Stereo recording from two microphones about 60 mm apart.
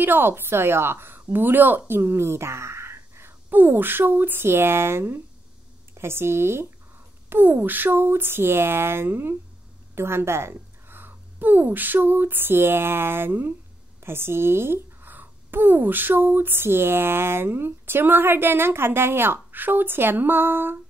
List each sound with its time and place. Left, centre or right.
0.0 s a woman's voice: right
3.4 s speech: right